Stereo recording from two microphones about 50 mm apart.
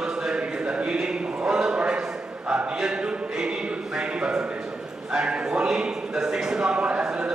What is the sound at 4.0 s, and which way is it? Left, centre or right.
Music, centre.